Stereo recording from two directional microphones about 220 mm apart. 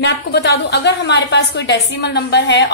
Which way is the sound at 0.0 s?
50° left (ahead or behind).